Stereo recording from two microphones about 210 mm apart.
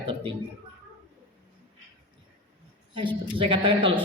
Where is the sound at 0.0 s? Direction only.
25° right (ahead or behind).